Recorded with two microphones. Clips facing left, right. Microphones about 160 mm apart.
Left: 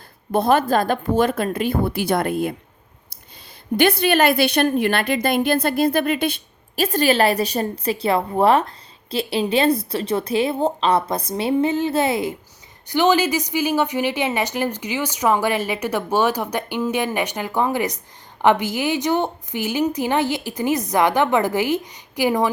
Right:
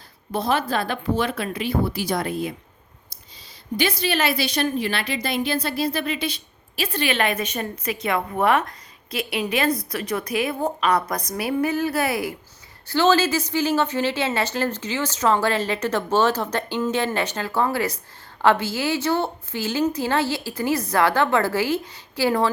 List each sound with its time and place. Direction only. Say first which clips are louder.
0.3 s speech: left 6 dB; 50° left (ahead or behind)
3.8 s a woman's voice: left 6 dB; 55° left (ahead or behind); by 22.4 s 15° left (ahead or behind)